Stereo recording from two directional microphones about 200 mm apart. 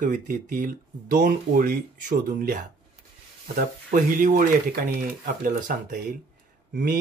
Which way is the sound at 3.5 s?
40° right (ahead or behind).